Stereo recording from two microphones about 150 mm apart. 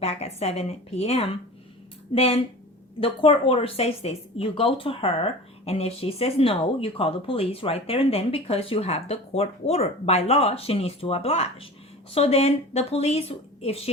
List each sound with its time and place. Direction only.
0.0 s a woman's voice: 45° left (ahead or behind)